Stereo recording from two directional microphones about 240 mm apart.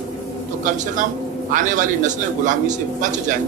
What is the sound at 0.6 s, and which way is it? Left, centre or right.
A man's voice, right.